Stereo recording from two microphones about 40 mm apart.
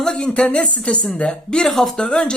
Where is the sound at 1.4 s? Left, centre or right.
Centre.